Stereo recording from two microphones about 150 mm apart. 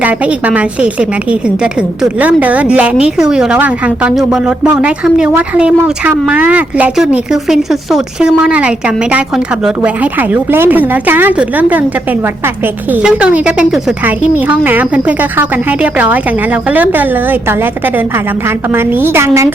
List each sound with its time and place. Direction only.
0.0 s speech: 10° right (ahead or behind)
12.9 s speech: 10° right (ahead or behind)